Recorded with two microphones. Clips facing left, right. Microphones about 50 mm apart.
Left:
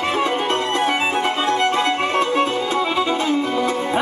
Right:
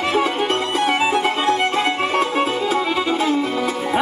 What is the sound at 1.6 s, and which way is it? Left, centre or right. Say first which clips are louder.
Music: left 1 dB; centre.